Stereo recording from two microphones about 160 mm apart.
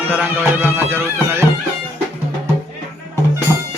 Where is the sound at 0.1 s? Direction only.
10° right (ahead or behind).